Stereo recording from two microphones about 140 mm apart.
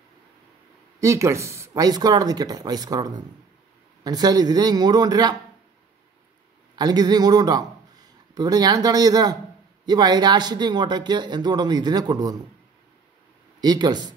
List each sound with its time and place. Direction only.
1.0 s speech: 20° right (ahead or behind)
6.7 s speech: 30° right (ahead or behind)
13.6 s speech: 30° right (ahead or behind)